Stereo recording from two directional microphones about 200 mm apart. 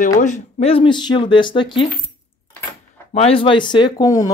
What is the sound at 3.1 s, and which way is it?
Speech, 30° left (ahead or behind).